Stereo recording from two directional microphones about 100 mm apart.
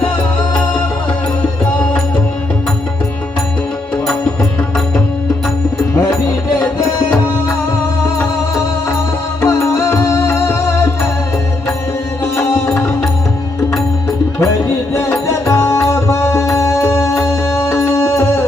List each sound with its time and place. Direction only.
9.4 s music: 30° left (ahead or behind)
12.4 s music: 30° left (ahead or behind)
14.9 s music: 25° left (ahead or behind)